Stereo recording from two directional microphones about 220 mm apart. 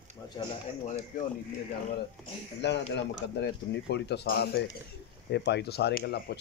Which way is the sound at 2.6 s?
50° left (ahead or behind).